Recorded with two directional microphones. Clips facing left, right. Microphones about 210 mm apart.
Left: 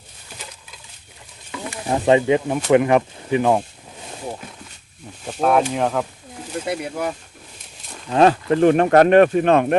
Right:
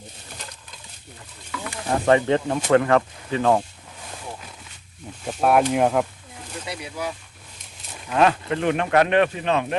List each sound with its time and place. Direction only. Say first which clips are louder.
1.5 s speech: left 2 dB; 20° left (ahead or behind)
5.2 s speech: left 1 dB; 5° right (ahead or behind)
6.7 s speech: left 6 dB; 55° left (ahead or behind)
8.1 s speech: left 5 dB; 35° left (ahead or behind); by 9.7 s 55° left (ahead or behind)